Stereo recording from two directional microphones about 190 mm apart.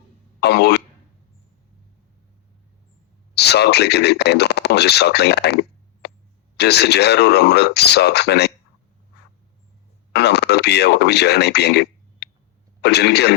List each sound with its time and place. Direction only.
0.3 s throat clearing: 60° left (ahead or behind)
3.3 s speech: 60° left (ahead or behind)
6.0 s a sound: 60° left (ahead or behind)
6.6 s speech: 60° left (ahead or behind)
10.1 s speech: 60° left (ahead or behind)